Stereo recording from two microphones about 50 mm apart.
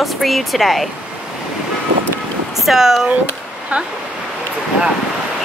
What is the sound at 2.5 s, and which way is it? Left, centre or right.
Speech, centre.